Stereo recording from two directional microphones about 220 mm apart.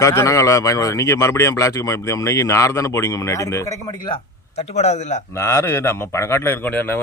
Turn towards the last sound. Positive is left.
turn(degrees=10)  # may be behind; listen again after turning